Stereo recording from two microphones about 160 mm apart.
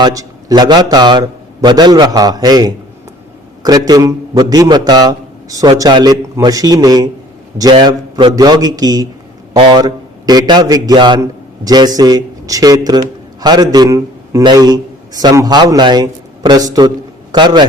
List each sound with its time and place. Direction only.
0.0 s a man's voice: 20° right (ahead or behind)